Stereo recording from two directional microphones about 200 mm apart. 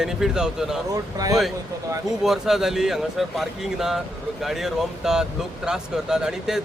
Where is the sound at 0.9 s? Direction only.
20° right (ahead or behind).